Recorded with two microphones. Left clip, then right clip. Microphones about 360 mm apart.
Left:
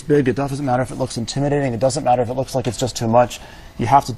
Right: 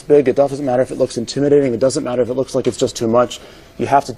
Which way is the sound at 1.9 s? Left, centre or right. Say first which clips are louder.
Even; centre.